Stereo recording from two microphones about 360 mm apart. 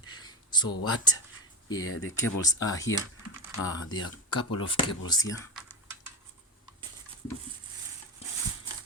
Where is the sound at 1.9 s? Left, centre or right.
Left.